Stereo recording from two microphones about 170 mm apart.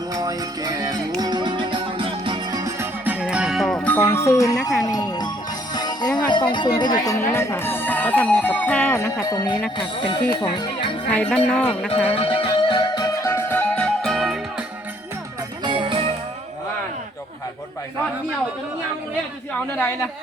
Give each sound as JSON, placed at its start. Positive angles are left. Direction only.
{"t": 0.1, "sound": "music", "side_deg": -20}
{"t": 4.9, "sound": "jingle bell", "side_deg": 25}
{"t": 5.7, "sound": "music", "side_deg": 25}
{"t": 6.1, "sound": "speech", "side_deg": 25}
{"t": 9.2, "sound": "speech", "side_deg": 25}
{"t": 11.1, "sound": "speech", "side_deg": 5}
{"t": 12.1, "sound": "music", "side_deg": 35}
{"t": 15.6, "sound": "music", "side_deg": -30}
{"t": 19.7, "sound": "speech", "side_deg": 10}